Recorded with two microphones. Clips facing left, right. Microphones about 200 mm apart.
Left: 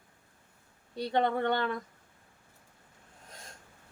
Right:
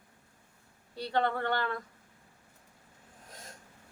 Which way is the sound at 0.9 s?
20° left (ahead or behind).